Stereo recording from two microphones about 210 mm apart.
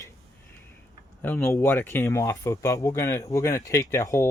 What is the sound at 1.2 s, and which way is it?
Speech, 10° left (ahead or behind).